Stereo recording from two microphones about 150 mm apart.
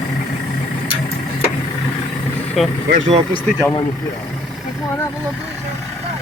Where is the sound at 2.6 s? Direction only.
Centre (ahead or behind).